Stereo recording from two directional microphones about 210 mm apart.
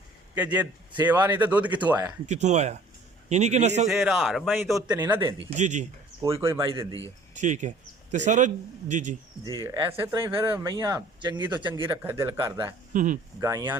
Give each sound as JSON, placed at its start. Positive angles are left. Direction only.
{"t": 0.3, "sound": "speech", "side_deg": -5}
{"t": 2.2, "sound": "speech", "side_deg": -35}
{"t": 3.8, "sound": "a man's voice", "side_deg": 0}
{"t": 4.5, "sound": "speech", "side_deg": -10}
{"t": 5.4, "sound": "speech", "side_deg": -30}
{"t": 6.2, "sound": "speech", "side_deg": -15}
{"t": 7.3, "sound": "speech", "side_deg": -35}
{"t": 9.4, "sound": "speech", "side_deg": -15}
{"t": 12.9, "sound": "speech", "side_deg": -40}
{"t": 13.4, "sound": "speech", "side_deg": -15}